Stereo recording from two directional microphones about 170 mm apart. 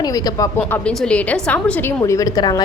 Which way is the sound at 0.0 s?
20° left (ahead or behind).